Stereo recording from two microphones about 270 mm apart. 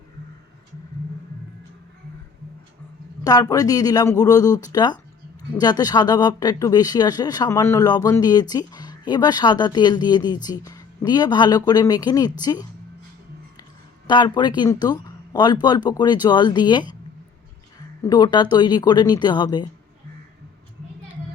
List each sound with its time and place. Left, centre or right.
3.2 s speech: centre
14.1 s speech: centre
18.0 s speech: centre